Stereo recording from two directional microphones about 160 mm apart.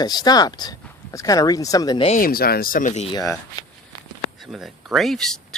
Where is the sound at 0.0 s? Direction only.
25° left (ahead or behind).